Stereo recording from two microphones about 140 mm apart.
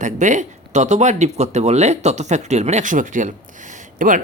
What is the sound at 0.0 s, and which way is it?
Speech, 60° right (ahead or behind).